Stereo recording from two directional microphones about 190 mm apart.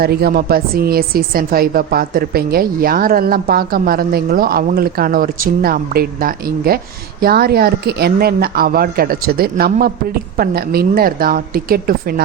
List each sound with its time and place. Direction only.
0.0 s a woman's voice: 55° right (ahead or behind)